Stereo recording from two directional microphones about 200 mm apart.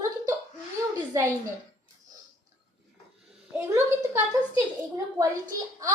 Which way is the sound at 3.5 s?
10° right (ahead or behind).